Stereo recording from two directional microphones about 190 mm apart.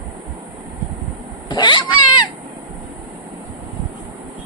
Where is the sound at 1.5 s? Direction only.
25° left (ahead or behind).